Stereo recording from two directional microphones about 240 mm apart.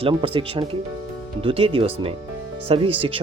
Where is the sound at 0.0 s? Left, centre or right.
Right.